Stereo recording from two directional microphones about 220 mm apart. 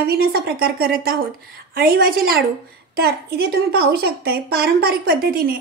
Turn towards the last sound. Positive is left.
turn(degrees=-40)  # may be behind; listen again after turning